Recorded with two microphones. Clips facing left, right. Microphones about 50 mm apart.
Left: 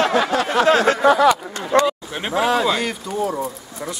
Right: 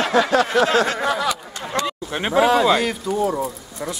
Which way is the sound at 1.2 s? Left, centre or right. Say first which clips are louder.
Left 8 dB; left.